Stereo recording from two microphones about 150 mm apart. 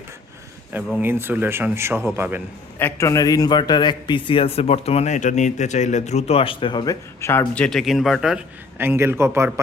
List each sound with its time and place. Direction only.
1.0 s speech: 15° right (ahead or behind)
2.7 s a man's voice: 15° left (ahead or behind)
7.2 s a man's voice: 15° left (ahead or behind); by 8.4 s 5° right (ahead or behind)
8.8 s speech: 15° right (ahead or behind)